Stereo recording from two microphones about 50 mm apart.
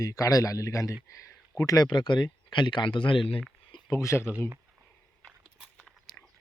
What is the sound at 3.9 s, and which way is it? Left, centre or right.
Speech, left.